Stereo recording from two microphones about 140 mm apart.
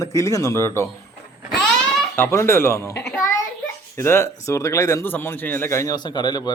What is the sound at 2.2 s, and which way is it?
A man's voice, 20° left (ahead or behind).